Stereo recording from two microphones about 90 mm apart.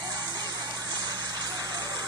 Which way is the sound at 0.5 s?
45° right (ahead or behind).